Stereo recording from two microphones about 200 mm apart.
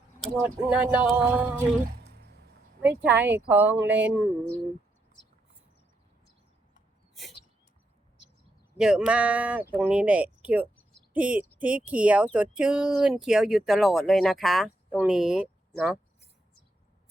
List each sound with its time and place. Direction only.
0.4 s speech: 5° right (ahead or behind)
2.0 s music: 55° right (ahead or behind)
2.8 s speech: 10° right (ahead or behind)
8.8 s speech: 5° right (ahead or behind)